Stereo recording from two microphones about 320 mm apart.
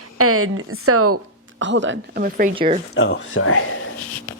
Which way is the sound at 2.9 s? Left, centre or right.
Left.